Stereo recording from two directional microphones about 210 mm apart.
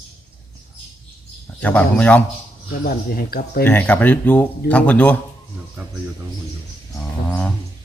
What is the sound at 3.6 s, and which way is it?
Speech, 10° left (ahead or behind).